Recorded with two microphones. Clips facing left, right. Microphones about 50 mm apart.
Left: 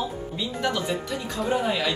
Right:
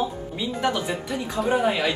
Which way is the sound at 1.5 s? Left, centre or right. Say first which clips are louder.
Right 3 dB; right.